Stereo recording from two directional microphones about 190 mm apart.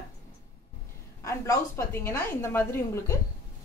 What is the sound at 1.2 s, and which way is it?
A woman's voice, 15° left (ahead or behind).